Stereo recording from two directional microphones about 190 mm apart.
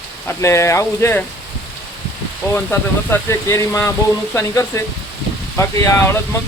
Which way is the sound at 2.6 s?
10° left (ahead or behind).